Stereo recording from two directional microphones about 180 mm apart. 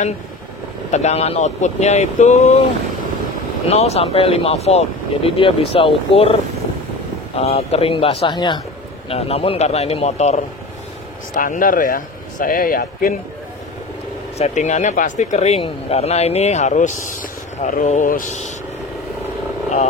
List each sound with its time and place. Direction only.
0.9 s speech: 35° left (ahead or behind)
3.6 s speech: 35° left (ahead or behind)
7.3 s speech: 35° left (ahead or behind)
11.3 s speech: 50° left (ahead or behind)
14.4 s speech: 40° left (ahead or behind)